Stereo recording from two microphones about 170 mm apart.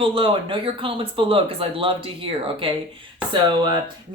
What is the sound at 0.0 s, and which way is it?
Speech, 30° right (ahead or behind).